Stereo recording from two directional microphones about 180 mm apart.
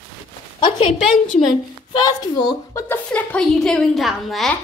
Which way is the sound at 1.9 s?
20° left (ahead or behind).